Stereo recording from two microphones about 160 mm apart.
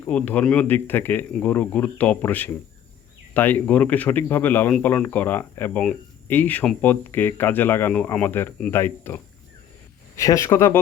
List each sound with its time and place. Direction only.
0.0 s speech: 10° left (ahead or behind)